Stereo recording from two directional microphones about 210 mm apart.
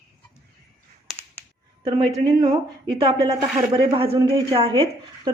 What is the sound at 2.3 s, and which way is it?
A woman's voice, 20° right (ahead or behind).